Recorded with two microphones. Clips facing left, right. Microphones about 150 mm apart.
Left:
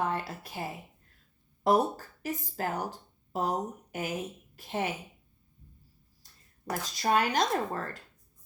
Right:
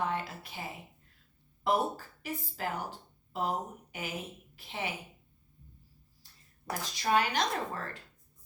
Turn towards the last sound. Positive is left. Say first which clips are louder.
# left 4 dB
turn(degrees=45)  # may be behind; listen again after turning